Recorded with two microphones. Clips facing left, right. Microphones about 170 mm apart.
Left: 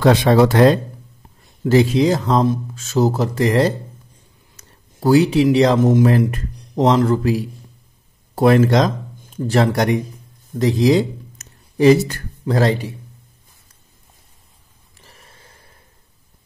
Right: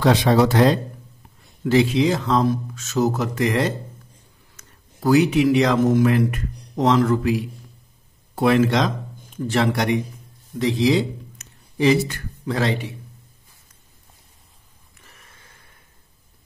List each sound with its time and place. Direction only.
0.0 s speech: 55° left (ahead or behind)
1.7 s speech: 40° left (ahead or behind)
2.4 s speech: 25° left (ahead or behind)
5.8 s speech: 20° left (ahead or behind)
6.0 s speech: 35° left (ahead or behind)
15.0 s a sound: 30° left (ahead or behind)